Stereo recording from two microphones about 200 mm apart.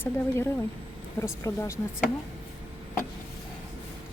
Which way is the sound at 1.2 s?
15° left (ahead or behind).